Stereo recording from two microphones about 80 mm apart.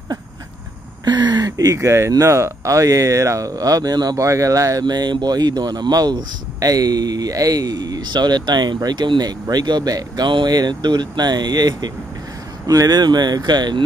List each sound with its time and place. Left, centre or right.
1.0 s speech: right
4.8 s speech: right
10.2 s speech: right